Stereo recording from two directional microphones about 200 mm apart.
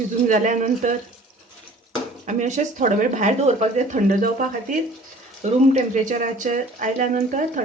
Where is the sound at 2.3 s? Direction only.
35° right (ahead or behind).